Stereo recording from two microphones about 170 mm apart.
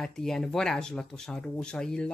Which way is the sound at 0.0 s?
5° left (ahead or behind).